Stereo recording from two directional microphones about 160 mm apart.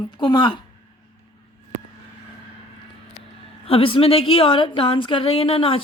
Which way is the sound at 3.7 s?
35° left (ahead or behind).